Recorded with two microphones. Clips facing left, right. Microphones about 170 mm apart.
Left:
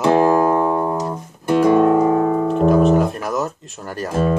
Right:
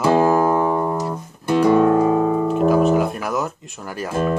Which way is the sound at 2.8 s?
Centre (ahead or behind).